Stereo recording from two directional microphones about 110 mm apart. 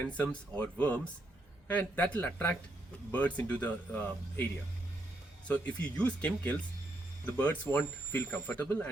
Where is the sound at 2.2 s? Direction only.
20° left (ahead or behind).